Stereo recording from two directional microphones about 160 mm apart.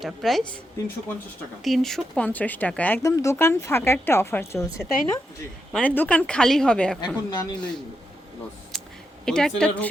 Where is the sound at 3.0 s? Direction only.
20° left (ahead or behind).